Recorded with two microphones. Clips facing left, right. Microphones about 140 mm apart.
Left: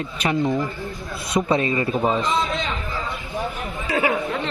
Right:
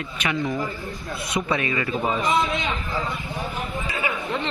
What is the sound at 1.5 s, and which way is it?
Speech, 30° left (ahead or behind).